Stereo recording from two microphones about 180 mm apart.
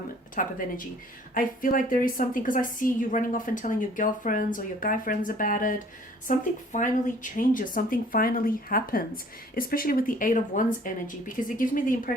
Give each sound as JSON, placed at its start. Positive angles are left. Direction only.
{"t": 0.4, "sound": "a woman's voice", "side_deg": 50}